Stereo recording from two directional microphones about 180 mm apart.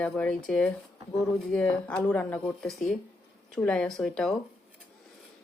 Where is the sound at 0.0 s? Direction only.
5° left (ahead or behind).